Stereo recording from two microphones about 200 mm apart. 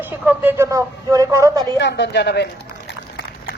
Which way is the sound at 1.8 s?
60° left (ahead or behind).